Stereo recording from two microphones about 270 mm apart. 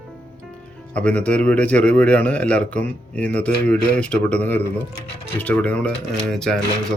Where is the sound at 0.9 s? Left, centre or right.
Centre.